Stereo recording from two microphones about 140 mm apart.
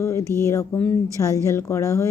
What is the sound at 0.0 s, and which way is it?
Speech, 20° left (ahead or behind).